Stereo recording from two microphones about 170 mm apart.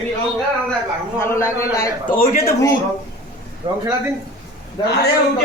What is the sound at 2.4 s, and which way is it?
Speech, 20° left (ahead or behind).